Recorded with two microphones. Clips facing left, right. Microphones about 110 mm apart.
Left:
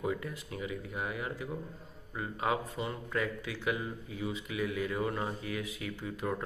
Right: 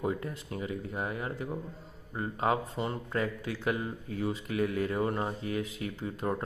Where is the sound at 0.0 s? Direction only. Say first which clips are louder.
Right 2 dB; 35° right (ahead or behind).